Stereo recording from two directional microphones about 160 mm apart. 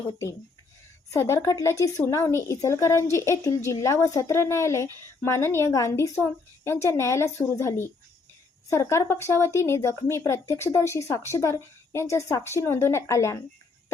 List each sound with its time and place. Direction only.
1.1 s speech: 20° left (ahead or behind)